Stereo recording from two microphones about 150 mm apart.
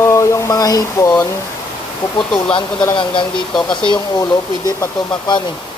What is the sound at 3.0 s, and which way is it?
Speech, 30° left (ahead or behind).